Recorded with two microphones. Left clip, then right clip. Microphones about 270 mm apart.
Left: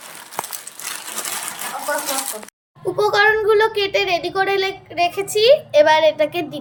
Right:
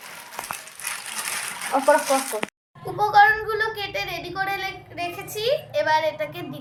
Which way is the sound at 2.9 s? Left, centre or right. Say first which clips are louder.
Left 1 dB; left.